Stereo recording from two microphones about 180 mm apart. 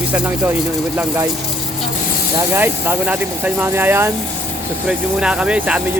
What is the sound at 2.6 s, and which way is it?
Speech, 10° right (ahead or behind).